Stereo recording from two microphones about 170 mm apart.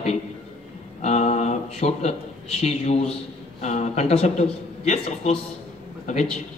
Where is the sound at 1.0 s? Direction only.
40° left (ahead or behind).